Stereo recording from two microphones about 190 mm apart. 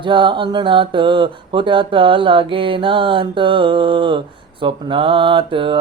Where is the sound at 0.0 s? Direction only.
25° right (ahead or behind).